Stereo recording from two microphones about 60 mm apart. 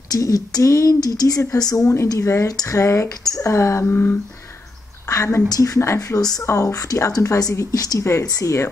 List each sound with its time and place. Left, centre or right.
0.1 s speech: left
1.4 s speech: left
3.1 s speech: left
3.4 s speech: left
3.8 s speech: left
5.0 s a woman's voice: left
6.4 s speech: left
7.7 s speech: left
8.0 s speech: left